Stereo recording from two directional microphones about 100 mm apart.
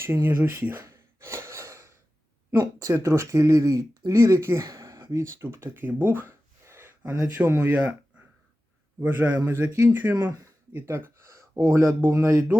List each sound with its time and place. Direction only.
0.0 s a sound: 25° right (ahead or behind)
2.7 s speech: 30° right (ahead or behind)
5.2 s speech: 25° right (ahead or behind)